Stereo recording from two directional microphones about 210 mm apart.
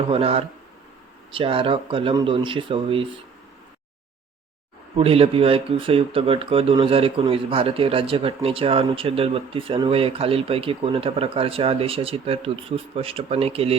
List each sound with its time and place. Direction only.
0.1 s speech: 25° right (ahead or behind)
4.9 s speech: 25° right (ahead or behind)